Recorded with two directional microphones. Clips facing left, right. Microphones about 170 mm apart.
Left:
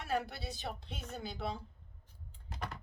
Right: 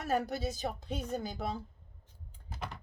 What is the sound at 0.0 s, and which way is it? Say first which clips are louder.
Speech: right 5 dB; 40° right (ahead or behind).